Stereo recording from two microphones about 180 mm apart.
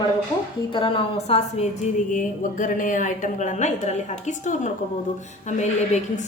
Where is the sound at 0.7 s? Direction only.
30° left (ahead or behind).